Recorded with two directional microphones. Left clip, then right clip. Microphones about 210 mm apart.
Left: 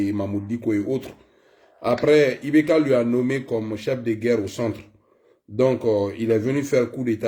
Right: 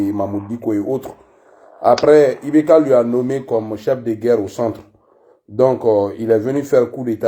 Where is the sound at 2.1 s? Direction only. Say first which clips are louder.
Right 3 dB; 25° right (ahead or behind).